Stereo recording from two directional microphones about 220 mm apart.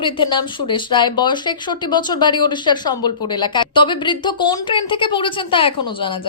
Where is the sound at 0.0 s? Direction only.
20° left (ahead or behind).